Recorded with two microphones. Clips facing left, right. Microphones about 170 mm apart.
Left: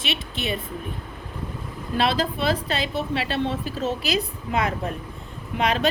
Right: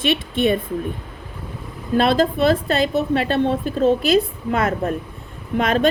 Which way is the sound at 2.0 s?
50° right (ahead or behind).